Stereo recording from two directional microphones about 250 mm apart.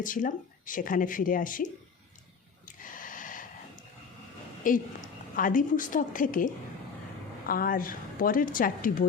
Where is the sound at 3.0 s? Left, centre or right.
Left.